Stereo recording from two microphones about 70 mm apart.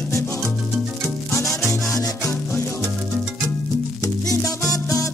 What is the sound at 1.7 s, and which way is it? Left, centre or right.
Music, left.